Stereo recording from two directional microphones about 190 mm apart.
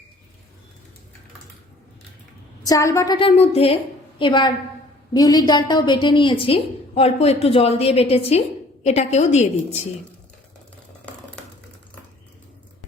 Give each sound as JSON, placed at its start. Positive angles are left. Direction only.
{"t": 2.6, "sound": "a woman's voice", "side_deg": 15}